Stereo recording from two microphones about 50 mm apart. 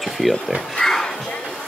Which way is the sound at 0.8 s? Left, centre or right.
Centre.